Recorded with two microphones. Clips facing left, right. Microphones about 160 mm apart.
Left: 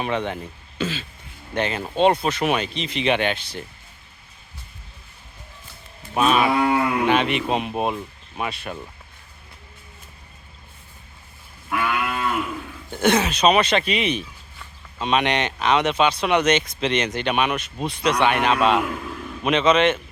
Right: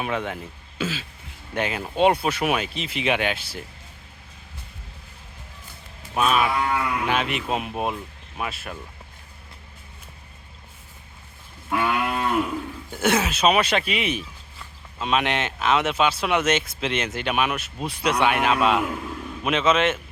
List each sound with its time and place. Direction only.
0.0 s speech: 5° right (ahead or behind)
6.1 s speech: centre (ahead or behind)
6.5 s wild animals: 35° left (ahead or behind)
7.1 s speech: 5° right (ahead or behind)
11.7 s cattle: 30° right (ahead or behind)
12.9 s speech: 5° right (ahead or behind)